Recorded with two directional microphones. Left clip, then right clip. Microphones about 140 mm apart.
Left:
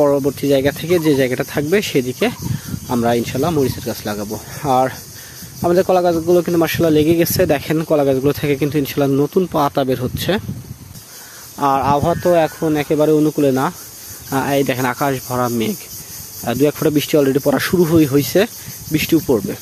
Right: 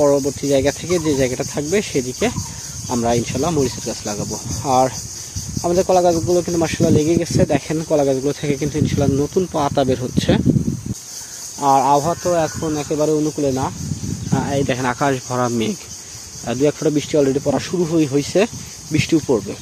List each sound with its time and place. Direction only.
0.0 s speech: 50° left (ahead or behind)
2.9 s speech: 35° left (ahead or behind)
11.6 s speech: 50° left (ahead or behind)
12.0 s speech: 80° left; by 13.7 s 60° left (ahead or behind)
14.3 s speech: 40° left (ahead or behind); by 15.7 s 10° left (ahead or behind)
16.4 s speech: 35° left (ahead or behind)
17.5 s speech: 65° left (ahead or behind)
18.0 s speech: 40° left (ahead or behind)